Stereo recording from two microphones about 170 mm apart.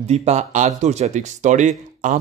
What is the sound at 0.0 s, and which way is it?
Speech, 40° right (ahead or behind).